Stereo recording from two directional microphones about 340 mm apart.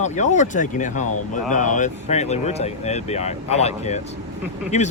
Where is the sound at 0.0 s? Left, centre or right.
Left.